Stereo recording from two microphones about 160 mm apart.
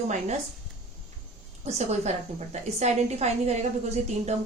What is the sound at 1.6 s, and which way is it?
A woman's voice, 45° right (ahead or behind).